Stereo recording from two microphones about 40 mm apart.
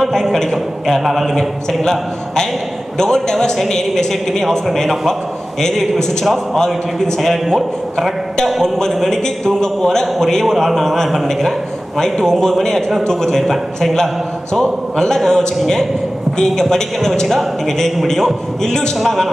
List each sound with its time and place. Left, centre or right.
0.1 s a sound: centre
1.2 s a man's voice: centre
5.6 s a man's voice: centre
8.6 s a man's voice: centre
18.9 s a man's voice: centre